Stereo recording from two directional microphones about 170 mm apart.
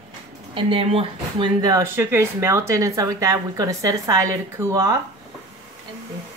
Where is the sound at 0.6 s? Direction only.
35° right (ahead or behind).